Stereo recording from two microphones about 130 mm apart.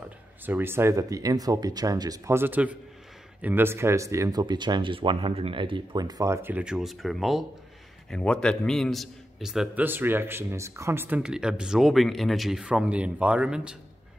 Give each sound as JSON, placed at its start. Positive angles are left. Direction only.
{"t": 0.5, "sound": "a man's voice", "side_deg": -15}
{"t": 9.8, "sound": "speech", "side_deg": -15}